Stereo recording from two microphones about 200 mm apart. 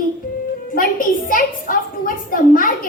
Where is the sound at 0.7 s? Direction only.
45° left (ahead or behind).